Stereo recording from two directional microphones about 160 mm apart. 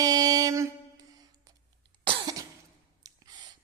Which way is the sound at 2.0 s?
25° right (ahead or behind).